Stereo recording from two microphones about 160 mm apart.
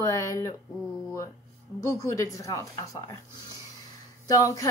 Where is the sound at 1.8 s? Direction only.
20° left (ahead or behind).